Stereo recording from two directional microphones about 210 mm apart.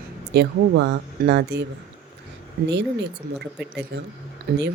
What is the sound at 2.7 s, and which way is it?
Speech, 55° right (ahead or behind).